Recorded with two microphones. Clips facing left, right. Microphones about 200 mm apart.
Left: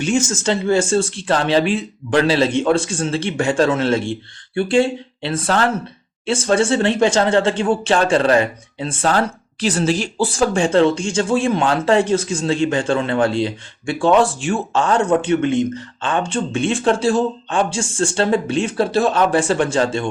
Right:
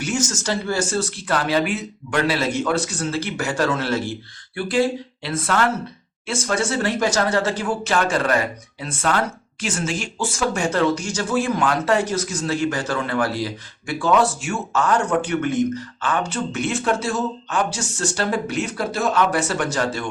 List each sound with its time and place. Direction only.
0.0 s speech: 25° left (ahead or behind)